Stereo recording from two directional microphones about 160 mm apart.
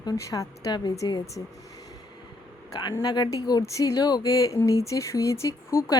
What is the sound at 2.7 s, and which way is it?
Speech, 25° left (ahead or behind).